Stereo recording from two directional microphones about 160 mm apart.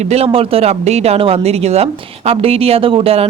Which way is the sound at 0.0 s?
40° right (ahead or behind).